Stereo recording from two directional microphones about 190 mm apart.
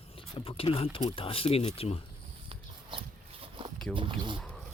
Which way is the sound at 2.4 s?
25° right (ahead or behind).